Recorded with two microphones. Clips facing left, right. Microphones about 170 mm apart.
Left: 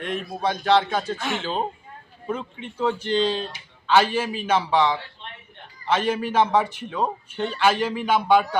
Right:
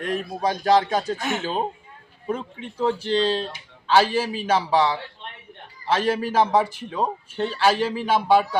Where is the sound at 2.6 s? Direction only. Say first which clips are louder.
Right 1 dB; 35° right (ahead or behind).